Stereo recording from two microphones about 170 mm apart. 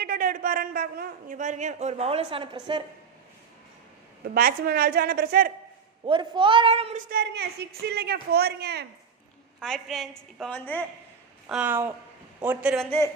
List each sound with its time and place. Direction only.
0.0 s a man's voice: 55° right (ahead or behind); by 2.8 s 30° right (ahead or behind)
4.4 s a woman's voice: 60° right (ahead or behind)
6.1 s speech: 30° right (ahead or behind)
7.1 s a woman's voice: 75° right (ahead or behind)
9.6 s a woman's voice: 5° left (ahead or behind)
11.4 s speech: 5° right (ahead or behind)
12.8 s a woman's voice: 10° left (ahead or behind)